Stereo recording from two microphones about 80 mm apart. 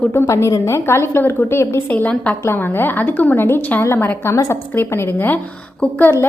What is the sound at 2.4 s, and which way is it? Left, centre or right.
A woman's voice, left.